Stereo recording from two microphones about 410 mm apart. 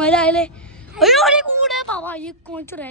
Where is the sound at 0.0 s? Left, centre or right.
Centre.